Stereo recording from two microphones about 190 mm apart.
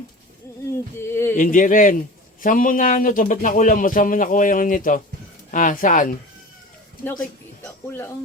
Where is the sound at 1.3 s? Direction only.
45° left (ahead or behind).